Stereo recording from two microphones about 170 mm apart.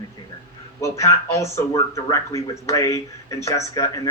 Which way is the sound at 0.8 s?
15° left (ahead or behind).